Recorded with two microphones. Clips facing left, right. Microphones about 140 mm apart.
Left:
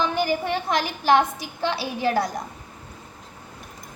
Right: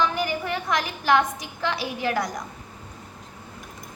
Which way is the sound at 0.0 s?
30° left (ahead or behind).